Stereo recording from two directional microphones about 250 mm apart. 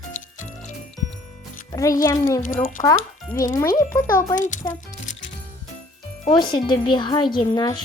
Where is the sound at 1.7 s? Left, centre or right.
Centre.